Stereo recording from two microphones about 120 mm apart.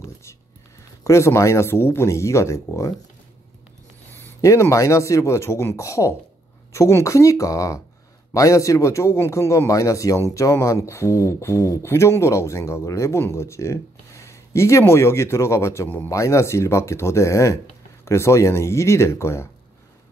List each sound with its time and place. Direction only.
1.0 s a man's voice: 25° left (ahead or behind)
4.2 s a man's voice: 25° left (ahead or behind)